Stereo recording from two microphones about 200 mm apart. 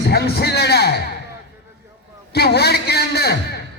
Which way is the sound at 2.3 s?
55° left (ahead or behind).